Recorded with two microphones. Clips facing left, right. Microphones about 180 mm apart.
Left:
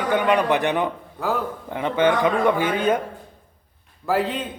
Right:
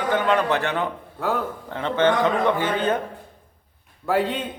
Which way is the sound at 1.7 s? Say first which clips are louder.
Even; 10° left (ahead or behind).